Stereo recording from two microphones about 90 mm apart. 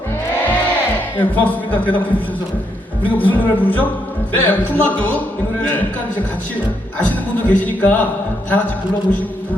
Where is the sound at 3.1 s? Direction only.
20° left (ahead or behind).